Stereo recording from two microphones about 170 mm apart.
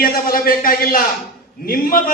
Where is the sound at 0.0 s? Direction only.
60° left (ahead or behind).